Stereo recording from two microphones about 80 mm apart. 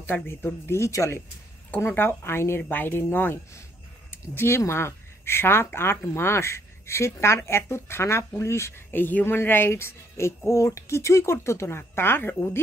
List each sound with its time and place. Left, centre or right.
0.0 s speech: left
8.9 s speech: left